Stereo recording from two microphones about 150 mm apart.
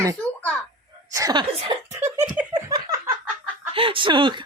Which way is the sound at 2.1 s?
15° right (ahead or behind).